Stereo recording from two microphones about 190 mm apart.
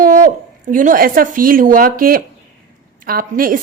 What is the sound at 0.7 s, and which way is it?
A woman's voice, 45° right (ahead or behind).